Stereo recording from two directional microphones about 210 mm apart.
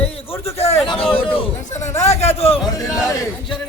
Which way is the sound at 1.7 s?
35° left (ahead or behind).